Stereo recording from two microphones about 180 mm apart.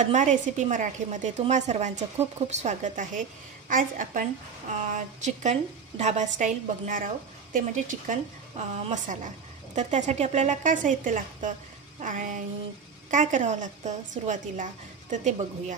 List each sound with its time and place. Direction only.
0.0 s a woman's voice: 40° right (ahead or behind)